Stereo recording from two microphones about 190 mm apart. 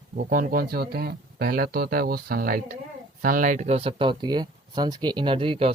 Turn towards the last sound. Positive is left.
turn(degrees=-30)  # may be behind; listen again after turning